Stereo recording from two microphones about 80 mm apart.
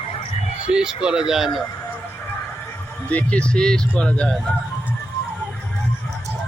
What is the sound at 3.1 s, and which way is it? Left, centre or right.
Speech, centre.